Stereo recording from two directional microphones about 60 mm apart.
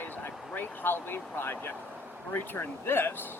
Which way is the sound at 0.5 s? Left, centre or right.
Left.